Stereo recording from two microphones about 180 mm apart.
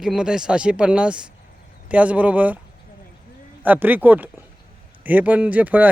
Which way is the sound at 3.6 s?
10° right (ahead or behind).